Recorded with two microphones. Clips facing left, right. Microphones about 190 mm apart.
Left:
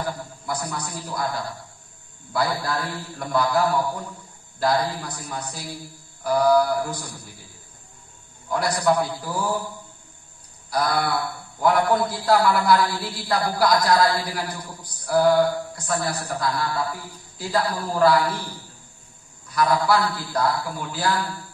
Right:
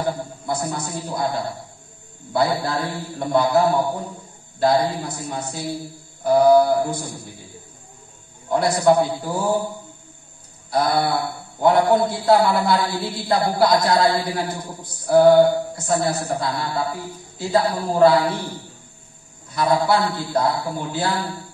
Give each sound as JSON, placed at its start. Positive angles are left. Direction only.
{"t": 0.0, "sound": "a man's voice", "side_deg": -25}
{"t": 8.5, "sound": "a man's voice", "side_deg": -25}
{"t": 10.7, "sound": "a man's voice", "side_deg": -25}